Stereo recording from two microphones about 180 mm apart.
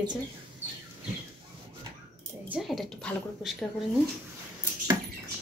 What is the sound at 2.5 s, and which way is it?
A woman's voice, centre (ahead or behind).